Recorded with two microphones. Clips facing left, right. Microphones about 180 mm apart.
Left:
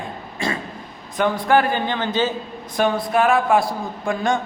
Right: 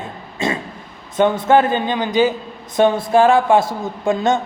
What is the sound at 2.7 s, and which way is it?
A man's voice, 25° right (ahead or behind).